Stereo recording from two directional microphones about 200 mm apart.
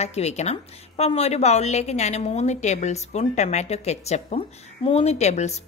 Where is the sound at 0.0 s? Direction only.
35° left (ahead or behind).